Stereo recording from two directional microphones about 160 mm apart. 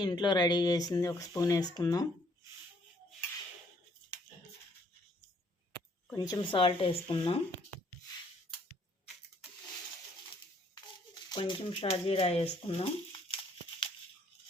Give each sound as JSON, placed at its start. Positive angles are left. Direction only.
{"t": 0.0, "sound": "speech", "side_deg": 25}
{"t": 6.1, "sound": "speech", "side_deg": 25}
{"t": 10.8, "sound": "shuffling cards", "side_deg": 25}